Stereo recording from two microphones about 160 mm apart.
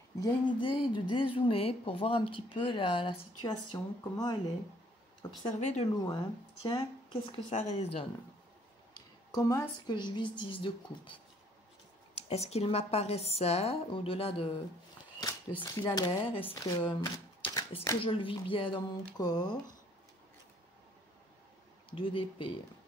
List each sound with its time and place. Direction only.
0.2 s speech: 30° left (ahead or behind)
6.0 s speech: 25° left (ahead or behind)
8.9 s a woman's voice: 20° left (ahead or behind)
12.2 s a woman's voice: 40° left (ahead or behind); by 17.1 s 20° left (ahead or behind)
17.4 s shuffling cards: 35° left (ahead or behind)
18.0 s a woman's voice: 35° left (ahead or behind)
21.9 s speech: 30° left (ahead or behind)